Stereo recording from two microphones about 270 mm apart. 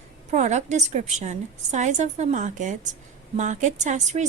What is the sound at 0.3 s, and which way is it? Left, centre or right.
A woman's voice, right.